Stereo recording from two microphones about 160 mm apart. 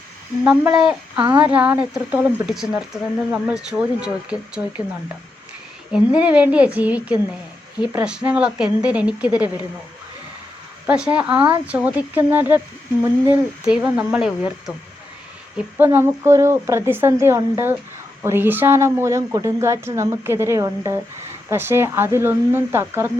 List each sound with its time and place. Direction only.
0.4 s speech: 5° right (ahead or behind)
5.9 s speech: 10° right (ahead or behind)
10.8 s speech: 5° right (ahead or behind)
15.5 s speech: 15° right (ahead or behind)